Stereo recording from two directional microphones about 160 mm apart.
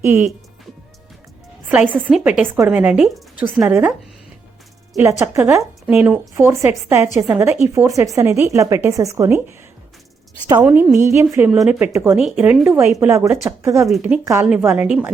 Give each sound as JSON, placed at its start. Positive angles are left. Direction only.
{"t": 0.0, "sound": "speech", "side_deg": -15}
{"t": 1.7, "sound": "speech", "side_deg": -10}
{"t": 5.2, "sound": "speech", "side_deg": -15}
{"t": 10.6, "sound": "speech", "side_deg": -10}
{"t": 13.8, "sound": "speech", "side_deg": -5}